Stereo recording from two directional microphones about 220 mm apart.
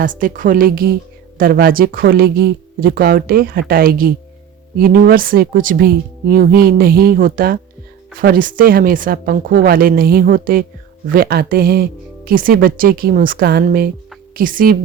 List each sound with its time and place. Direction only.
0.0 s speech: 40° right (ahead or behind)